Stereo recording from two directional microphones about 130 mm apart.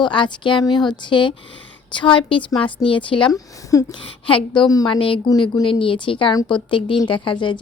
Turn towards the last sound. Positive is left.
turn(degrees=40)  # may be behind; listen again after turning